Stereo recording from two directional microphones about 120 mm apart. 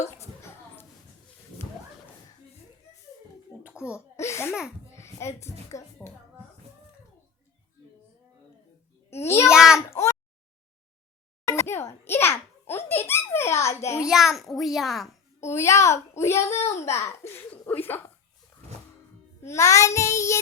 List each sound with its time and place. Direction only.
3.6 s cough: 10° right (ahead or behind)
3.9 s laughter: 20° left (ahead or behind)
4.9 s a child's voice: 25° left (ahead or behind)
9.0 s a child's voice: 20° left (ahead or behind)
9.5 s a child's voice: 5° right (ahead or behind)
9.9 s a sound: 25° left (ahead or behind)
11.4 s a child's voice: 25° left (ahead or behind)
14.1 s a child's voice: centre (ahead or behind)
15.4 s a child's voice: 20° left (ahead or behind)
19.4 s a child's voice: 25° left (ahead or behind)